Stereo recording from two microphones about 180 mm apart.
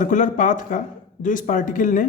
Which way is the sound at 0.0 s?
45° left (ahead or behind).